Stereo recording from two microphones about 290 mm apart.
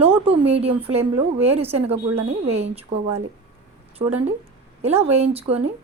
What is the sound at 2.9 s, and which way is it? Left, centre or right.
Speech, right.